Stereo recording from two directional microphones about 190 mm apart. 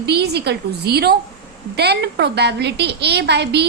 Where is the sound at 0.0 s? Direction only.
60° right (ahead or behind).